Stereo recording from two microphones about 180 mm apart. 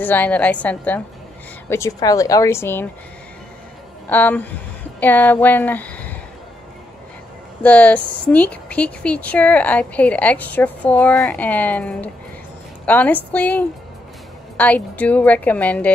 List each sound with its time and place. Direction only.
0.0 s speech: 10° left (ahead or behind)
4.1 s speech: 10° left (ahead or behind)
7.6 s speech: 10° left (ahead or behind)